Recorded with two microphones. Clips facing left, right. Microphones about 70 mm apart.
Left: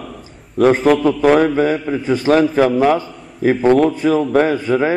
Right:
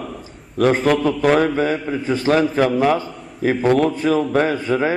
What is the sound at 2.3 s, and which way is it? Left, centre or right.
A man's voice, centre.